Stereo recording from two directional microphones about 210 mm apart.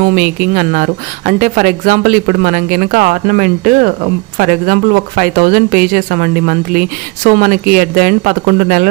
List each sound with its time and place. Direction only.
0.0 s speech: 40° right (ahead or behind)